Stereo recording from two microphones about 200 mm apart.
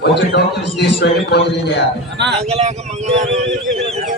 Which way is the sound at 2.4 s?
30° right (ahead or behind).